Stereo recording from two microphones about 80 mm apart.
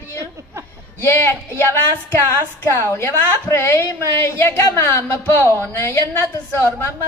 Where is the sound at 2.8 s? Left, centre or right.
Left.